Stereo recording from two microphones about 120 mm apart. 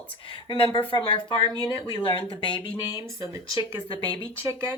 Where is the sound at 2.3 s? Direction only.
45° left (ahead or behind).